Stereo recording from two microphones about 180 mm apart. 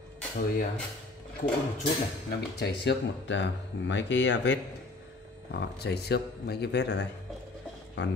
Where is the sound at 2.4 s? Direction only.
65° left (ahead or behind); by 4.6 s 85° left.